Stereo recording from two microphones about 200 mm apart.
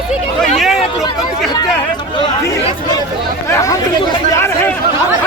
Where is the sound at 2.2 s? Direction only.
20° left (ahead or behind).